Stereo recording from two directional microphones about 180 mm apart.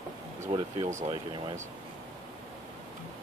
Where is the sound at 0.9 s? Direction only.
40° right (ahead or behind).